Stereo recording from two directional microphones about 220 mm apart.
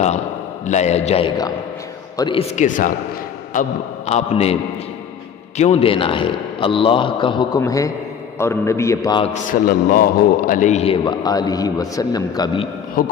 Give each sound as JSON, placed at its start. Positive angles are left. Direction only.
{"t": 0.6, "sound": "a man's voice", "side_deg": 30}
{"t": 2.6, "sound": "a man's voice", "side_deg": 35}
{"t": 5.5, "sound": "a man's voice", "side_deg": 30}
{"t": 9.3, "sound": "a man's voice", "side_deg": 40}